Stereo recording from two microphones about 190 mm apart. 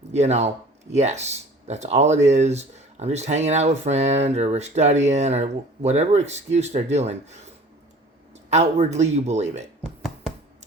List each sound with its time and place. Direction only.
0.1 s speech: 35° right (ahead or behind)
8.4 s speech: 35° right (ahead or behind)